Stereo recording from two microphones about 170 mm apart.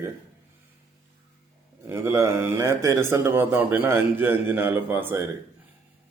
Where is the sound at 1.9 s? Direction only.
15° right (ahead or behind).